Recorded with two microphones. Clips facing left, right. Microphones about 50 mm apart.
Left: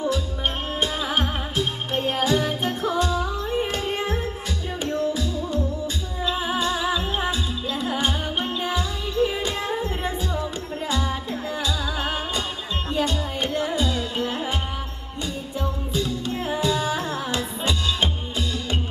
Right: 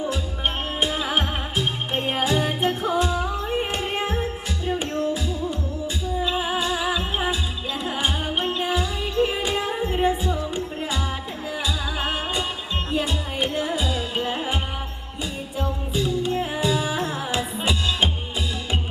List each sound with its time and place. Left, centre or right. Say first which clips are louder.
0.8 s music: right 1 dB; centre
2.0 s music: left 1 dB; centre
4.7 s music: right 1 dB; right
5.1 s music: left 1 dB; centre
15.9 s music: right 5 dB; centre